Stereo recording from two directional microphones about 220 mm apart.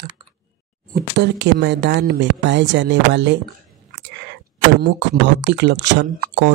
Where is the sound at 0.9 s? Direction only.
50° right (ahead or behind).